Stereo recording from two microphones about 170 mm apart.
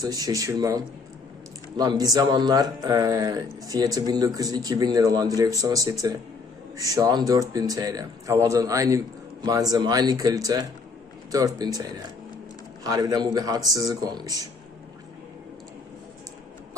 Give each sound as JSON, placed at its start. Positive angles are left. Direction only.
{"t": 0.0, "sound": "speech", "side_deg": -20}